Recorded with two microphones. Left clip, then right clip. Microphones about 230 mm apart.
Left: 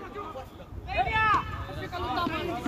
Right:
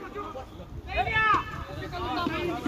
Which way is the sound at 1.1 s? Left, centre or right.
Left.